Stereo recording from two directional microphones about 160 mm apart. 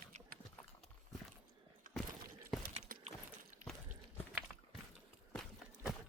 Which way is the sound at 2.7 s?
60° right (ahead or behind).